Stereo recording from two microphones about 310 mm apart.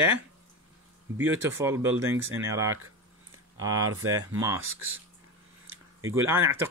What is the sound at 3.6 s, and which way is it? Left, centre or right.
Speech, right.